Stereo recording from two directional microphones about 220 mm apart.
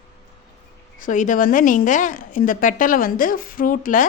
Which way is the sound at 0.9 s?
35° left (ahead or behind).